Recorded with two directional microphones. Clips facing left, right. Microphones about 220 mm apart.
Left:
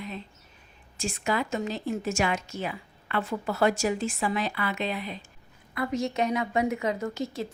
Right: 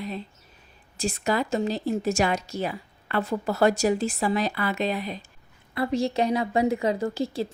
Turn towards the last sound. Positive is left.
turn(degrees=-30)  # may be behind; listen again after turning